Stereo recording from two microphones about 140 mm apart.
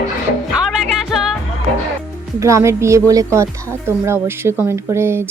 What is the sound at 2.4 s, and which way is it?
A woman's voice, 20° right (ahead or behind).